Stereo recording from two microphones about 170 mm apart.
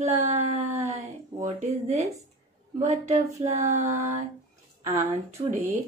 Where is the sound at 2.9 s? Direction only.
40° right (ahead or behind).